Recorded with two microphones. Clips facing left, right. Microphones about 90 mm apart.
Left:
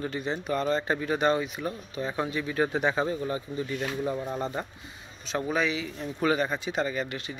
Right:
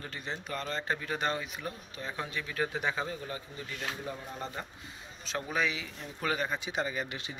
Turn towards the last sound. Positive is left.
turn(degrees=-20)  # may be behind; listen again after turning